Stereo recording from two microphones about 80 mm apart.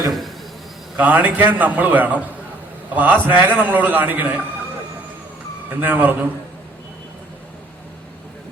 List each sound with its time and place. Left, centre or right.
0.1 s a sound: centre
0.9 s a man's voice: right
5.8 s a man's voice: right